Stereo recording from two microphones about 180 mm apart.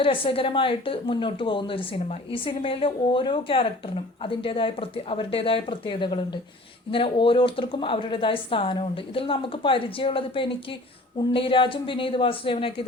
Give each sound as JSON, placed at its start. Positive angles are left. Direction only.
{"t": 0.0, "sound": "a woman's voice", "side_deg": 30}